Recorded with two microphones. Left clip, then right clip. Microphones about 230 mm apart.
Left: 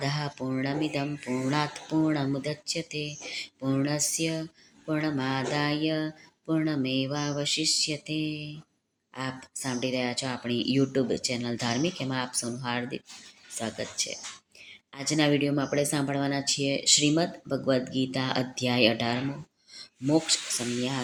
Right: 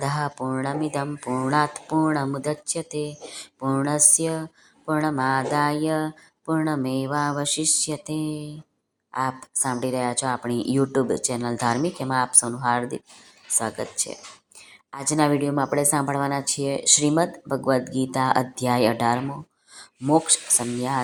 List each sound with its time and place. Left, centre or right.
0.0 s speech: centre